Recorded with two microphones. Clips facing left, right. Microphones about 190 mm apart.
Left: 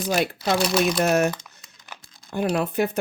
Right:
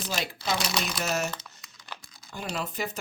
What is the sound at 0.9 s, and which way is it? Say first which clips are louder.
Speech: left 9 dB; 60° left (ahead or behind).